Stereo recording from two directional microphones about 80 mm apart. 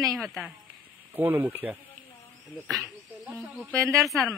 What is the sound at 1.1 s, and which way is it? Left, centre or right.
Speech, right.